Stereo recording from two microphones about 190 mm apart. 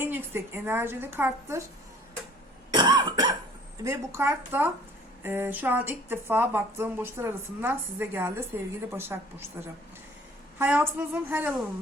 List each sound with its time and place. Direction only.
0.0 s speech: 10° right (ahead or behind)
2.7 s cough: 20° right (ahead or behind)
3.8 s speech: 15° right (ahead or behind)